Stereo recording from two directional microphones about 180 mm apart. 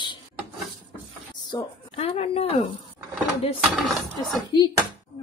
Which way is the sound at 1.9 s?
35° left (ahead or behind).